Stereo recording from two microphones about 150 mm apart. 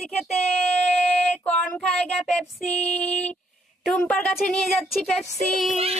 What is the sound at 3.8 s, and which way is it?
Child singing, 5° left (ahead or behind).